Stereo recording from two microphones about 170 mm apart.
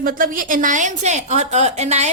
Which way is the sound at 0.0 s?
55° right (ahead or behind).